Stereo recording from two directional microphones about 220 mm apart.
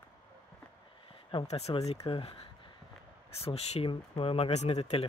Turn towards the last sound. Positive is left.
turn(degrees=25)  # may be behind; listen again after turning